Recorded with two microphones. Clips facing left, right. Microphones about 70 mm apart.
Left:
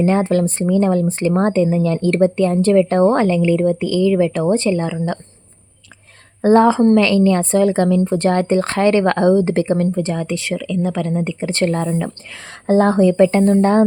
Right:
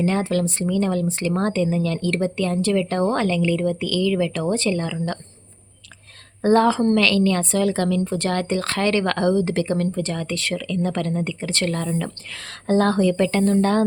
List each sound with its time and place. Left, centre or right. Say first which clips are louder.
0.0 s speech: left 6 dB; left
6.4 s speech: left 5 dB; left
11.2 s speech: left 6 dB; left